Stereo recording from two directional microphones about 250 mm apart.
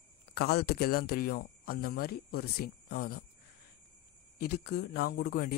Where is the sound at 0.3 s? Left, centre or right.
Left.